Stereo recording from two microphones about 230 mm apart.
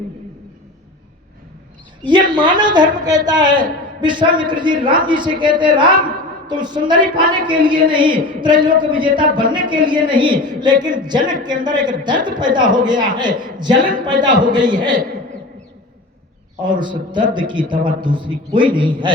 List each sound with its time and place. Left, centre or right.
2.0 s a woman's voice: centre
16.6 s a woman's voice: centre